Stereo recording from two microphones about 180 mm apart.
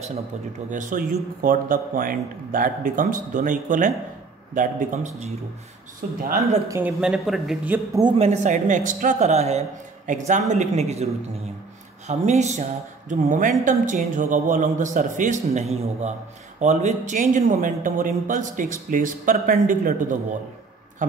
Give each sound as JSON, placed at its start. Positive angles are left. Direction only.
{"t": 0.7, "sound": "a man's voice", "side_deg": -45}
{"t": 6.7, "sound": "speech", "side_deg": -5}
{"t": 8.2, "sound": "speech", "side_deg": -40}
{"t": 12.1, "sound": "a man's voice", "side_deg": -40}